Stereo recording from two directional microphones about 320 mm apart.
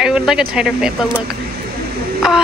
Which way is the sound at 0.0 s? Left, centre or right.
Centre.